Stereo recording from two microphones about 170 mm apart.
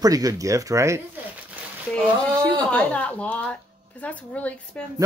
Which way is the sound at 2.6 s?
10° left (ahead or behind).